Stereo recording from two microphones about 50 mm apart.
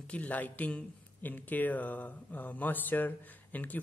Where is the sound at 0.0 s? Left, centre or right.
Left.